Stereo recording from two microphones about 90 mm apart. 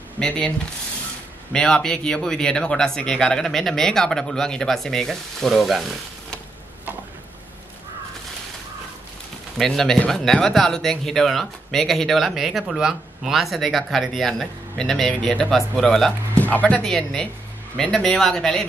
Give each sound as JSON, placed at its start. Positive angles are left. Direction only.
{"t": 1.5, "sound": "speech", "side_deg": 5}
{"t": 9.6, "sound": "speech", "side_deg": 5}
{"t": 16.3, "sound": "speech", "side_deg": 15}